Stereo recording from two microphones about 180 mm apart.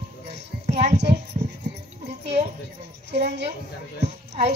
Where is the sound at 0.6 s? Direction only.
40° right (ahead or behind).